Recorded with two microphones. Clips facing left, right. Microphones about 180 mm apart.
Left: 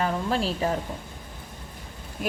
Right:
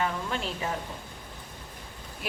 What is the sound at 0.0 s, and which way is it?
Speech, 35° left (ahead or behind).